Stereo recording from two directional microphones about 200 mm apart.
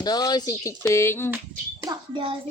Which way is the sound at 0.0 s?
20° left (ahead or behind).